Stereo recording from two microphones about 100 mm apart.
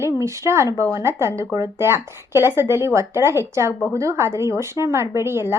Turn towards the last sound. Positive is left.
turn(degrees=-25)  # may be behind; listen again after turning